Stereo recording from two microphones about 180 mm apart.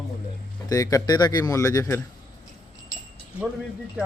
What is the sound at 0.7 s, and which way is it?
Speech, 20° left (ahead or behind).